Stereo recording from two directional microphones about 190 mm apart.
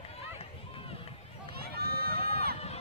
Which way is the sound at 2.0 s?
30° left (ahead or behind).